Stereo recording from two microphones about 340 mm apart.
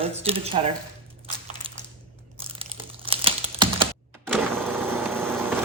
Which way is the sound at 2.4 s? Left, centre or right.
Centre.